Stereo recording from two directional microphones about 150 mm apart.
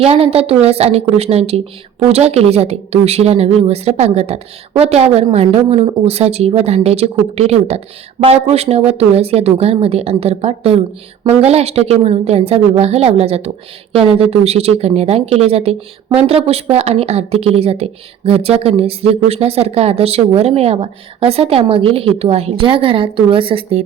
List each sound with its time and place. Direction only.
0.0 s a woman's voice: 40° right (ahead or behind)